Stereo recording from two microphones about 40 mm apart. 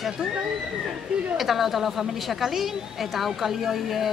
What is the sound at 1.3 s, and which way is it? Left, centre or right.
A woman's voice, centre.